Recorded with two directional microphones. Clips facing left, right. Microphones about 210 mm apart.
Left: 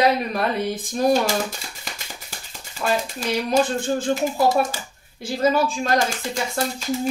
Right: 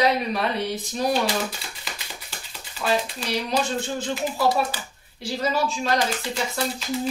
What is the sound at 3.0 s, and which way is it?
Speech, 45° left (ahead or behind).